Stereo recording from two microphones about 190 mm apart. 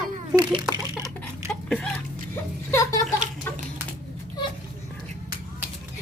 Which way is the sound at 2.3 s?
15° left (ahead or behind).